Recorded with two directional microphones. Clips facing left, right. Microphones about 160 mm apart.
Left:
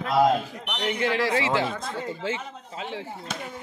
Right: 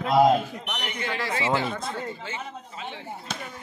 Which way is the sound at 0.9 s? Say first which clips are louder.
Left 7 dB; 85° left.